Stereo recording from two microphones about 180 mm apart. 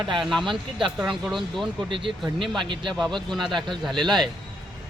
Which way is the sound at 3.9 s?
25° right (ahead or behind).